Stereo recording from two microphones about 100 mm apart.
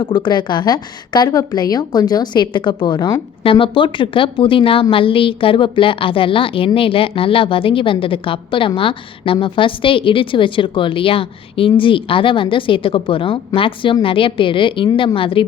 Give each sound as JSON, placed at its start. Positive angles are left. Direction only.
{"t": 0.0, "sound": "a woman's voice", "side_deg": 45}
{"t": 3.4, "sound": "a woman's voice", "side_deg": 60}